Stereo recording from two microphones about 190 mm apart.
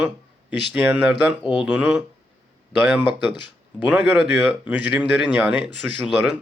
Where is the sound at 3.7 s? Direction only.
10° right (ahead or behind).